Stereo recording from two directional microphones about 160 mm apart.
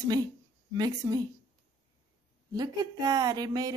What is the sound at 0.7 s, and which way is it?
Speech, 25° right (ahead or behind).